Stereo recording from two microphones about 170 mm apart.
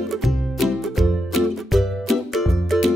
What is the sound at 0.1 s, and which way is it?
Music, centre (ahead or behind).